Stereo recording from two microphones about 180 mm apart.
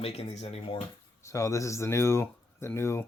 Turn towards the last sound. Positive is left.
turn(degrees=15)  # may be behind; listen again after turning